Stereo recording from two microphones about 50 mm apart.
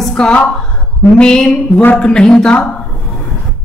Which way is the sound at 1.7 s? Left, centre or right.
Left.